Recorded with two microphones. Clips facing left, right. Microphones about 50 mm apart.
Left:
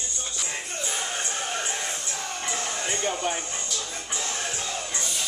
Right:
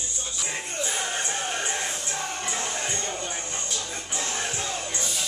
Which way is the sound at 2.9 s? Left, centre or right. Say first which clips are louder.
Left 3 dB; left.